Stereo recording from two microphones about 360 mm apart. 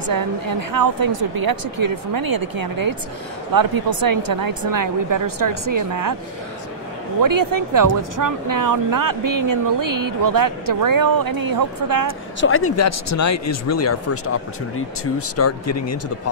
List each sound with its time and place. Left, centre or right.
0.0 s a woman's voice: right
7.2 s speech: right
12.4 s speech: left